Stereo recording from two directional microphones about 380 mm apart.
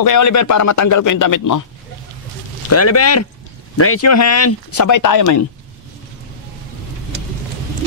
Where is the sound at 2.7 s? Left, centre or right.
Left.